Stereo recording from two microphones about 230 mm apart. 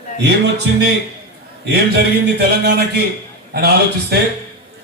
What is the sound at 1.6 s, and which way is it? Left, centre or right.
Speech, right.